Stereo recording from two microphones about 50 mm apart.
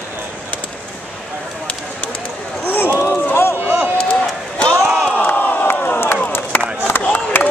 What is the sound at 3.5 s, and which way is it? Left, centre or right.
Run, right.